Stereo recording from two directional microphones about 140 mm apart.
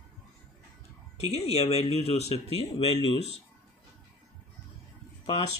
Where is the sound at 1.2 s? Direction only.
50° left (ahead or behind).